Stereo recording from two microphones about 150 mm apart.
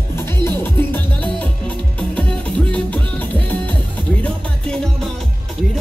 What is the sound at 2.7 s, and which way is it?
Music, 10° left (ahead or behind).